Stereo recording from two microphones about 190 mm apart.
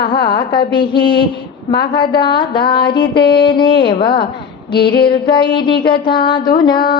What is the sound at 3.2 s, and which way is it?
Speech, 60° left (ahead or behind).